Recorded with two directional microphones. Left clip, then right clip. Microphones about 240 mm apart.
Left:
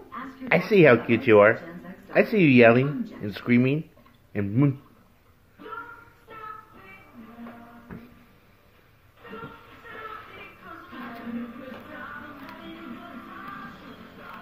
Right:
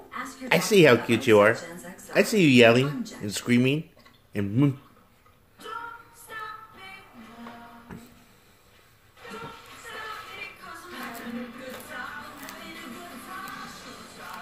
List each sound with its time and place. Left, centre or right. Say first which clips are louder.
0.5 s speech: left 1 dB; centre